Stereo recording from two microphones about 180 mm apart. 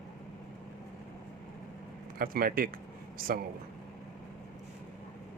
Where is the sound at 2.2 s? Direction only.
55° right (ahead or behind).